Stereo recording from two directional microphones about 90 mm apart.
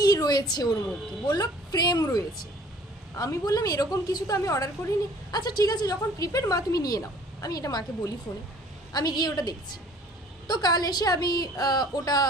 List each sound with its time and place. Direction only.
0.0 s a woman's voice: 45° left (ahead or behind)